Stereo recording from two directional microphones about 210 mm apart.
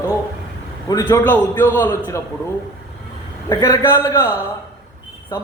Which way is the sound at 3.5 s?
15° left (ahead or behind).